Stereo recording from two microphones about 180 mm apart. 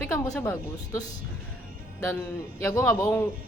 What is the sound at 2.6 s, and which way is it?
Speech, 15° left (ahead or behind).